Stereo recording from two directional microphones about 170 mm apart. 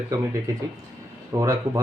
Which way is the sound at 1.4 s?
20° right (ahead or behind).